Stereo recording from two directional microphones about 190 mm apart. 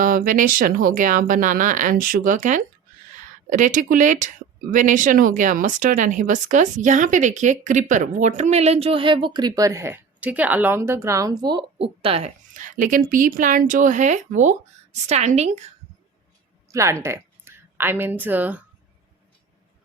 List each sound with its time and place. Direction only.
0.0 s speech: 45° right (ahead or behind)
16.7 s speech: 15° right (ahead or behind)